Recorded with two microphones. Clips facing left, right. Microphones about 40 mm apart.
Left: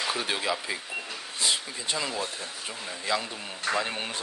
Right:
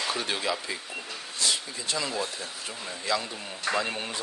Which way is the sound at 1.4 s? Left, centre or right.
Centre.